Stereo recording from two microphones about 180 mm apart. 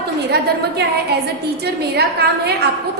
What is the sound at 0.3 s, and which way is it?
A woman's voice, 65° right (ahead or behind).